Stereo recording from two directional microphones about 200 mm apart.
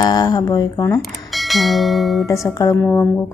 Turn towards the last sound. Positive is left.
turn(degrees=10)  # may be behind; listen again after turning